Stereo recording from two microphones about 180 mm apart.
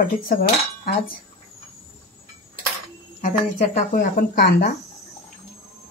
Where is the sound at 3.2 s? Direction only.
40° left (ahead or behind).